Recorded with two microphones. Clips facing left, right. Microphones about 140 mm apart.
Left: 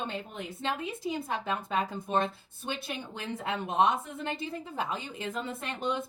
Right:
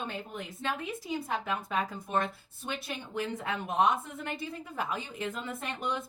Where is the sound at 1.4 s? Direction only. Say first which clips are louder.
Left 1 dB; 25° left (ahead or behind).